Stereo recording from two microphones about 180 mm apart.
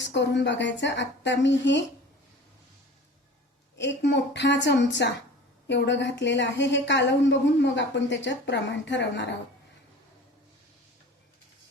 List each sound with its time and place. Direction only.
0.0 s a woman's voice: 75° left (ahead or behind)
3.8 s a woman's voice: 75° left (ahead or behind)